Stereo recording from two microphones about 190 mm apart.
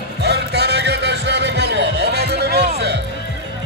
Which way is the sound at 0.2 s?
60° right (ahead or behind).